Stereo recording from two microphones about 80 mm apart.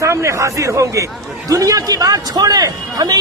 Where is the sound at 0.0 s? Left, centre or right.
Right.